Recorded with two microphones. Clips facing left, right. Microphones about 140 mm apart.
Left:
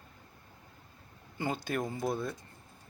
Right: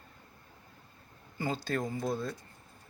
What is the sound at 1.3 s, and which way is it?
Speech, 20° left (ahead or behind).